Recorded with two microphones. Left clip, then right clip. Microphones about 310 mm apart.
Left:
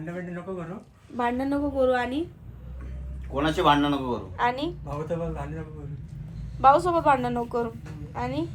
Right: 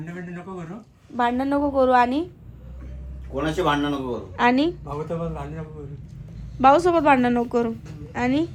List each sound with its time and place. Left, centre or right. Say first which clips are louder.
1.1 s a woman's voice: right 5 dB; centre; by 2.2 s right
3.3 s a man's voice: left 1 dB; centre
4.4 s a woman's voice: right 7 dB; right
4.9 s a man's voice: right 2 dB; centre
6.6 s a woman's voice: right 3 dB; right